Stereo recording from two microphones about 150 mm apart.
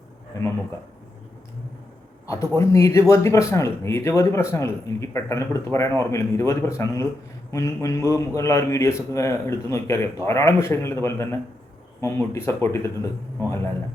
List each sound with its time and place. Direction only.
2.2 s a man's voice: 20° left (ahead or behind)